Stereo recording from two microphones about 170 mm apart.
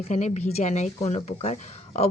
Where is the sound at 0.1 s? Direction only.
45° left (ahead or behind).